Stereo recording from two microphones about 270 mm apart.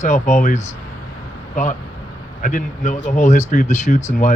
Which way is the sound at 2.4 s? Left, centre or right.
Left.